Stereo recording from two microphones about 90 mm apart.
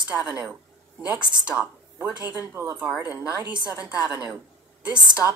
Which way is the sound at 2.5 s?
25° right (ahead or behind).